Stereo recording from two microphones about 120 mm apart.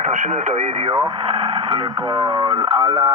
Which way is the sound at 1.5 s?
50° right (ahead or behind).